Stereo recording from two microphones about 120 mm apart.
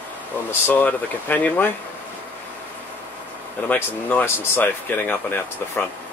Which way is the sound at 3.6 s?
15° left (ahead or behind).